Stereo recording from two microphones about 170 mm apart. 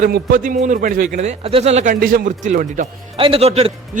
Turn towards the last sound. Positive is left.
turn(degrees=-35)  # may be behind; listen again after turning